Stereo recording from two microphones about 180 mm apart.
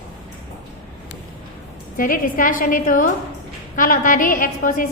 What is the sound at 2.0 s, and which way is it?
A woman's voice, 50° left (ahead or behind).